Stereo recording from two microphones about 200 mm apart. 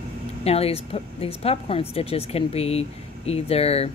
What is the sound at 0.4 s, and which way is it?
Speech, 30° left (ahead or behind).